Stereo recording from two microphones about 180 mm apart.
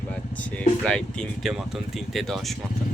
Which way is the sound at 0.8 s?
5° left (ahead or behind).